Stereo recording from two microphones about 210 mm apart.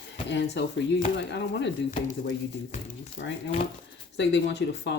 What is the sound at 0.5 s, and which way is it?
Speech, 55° left (ahead or behind).